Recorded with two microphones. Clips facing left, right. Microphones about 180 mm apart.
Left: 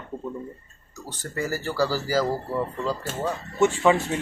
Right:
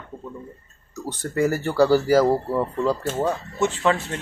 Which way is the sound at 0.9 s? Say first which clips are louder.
Right 8 dB; 60° right (ahead or behind).